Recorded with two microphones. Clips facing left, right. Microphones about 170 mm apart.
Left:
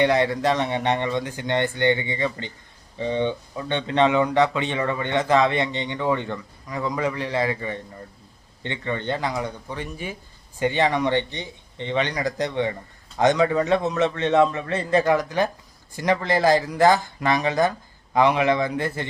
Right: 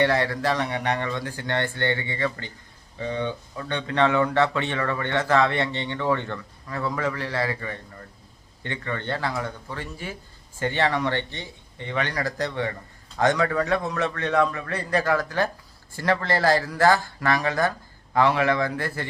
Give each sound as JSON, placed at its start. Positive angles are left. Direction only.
{"t": 0.0, "sound": "speech", "side_deg": 20}